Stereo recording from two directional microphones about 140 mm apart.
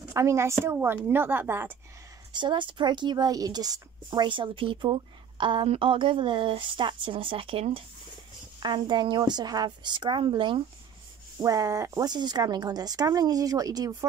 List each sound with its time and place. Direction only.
0.1 s a woman's voice: 20° right (ahead or behind)
2.3 s speech: 35° right (ahead or behind)
11.4 s speech: 25° right (ahead or behind)